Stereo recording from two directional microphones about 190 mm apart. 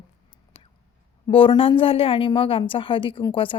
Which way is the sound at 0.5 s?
30° left (ahead or behind).